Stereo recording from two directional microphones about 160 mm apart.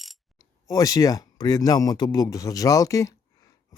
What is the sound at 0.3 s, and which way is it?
Speech, 20° left (ahead or behind).